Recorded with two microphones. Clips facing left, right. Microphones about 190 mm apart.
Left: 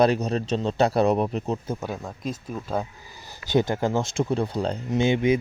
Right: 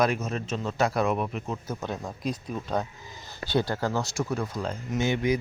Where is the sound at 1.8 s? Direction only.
5° left (ahead or behind).